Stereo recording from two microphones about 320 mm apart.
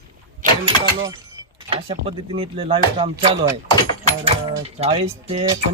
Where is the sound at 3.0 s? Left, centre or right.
Centre.